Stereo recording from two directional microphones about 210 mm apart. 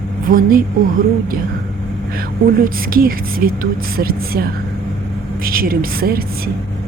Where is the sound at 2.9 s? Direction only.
45° right (ahead or behind).